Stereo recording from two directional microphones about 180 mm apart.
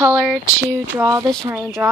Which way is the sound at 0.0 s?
10° right (ahead or behind).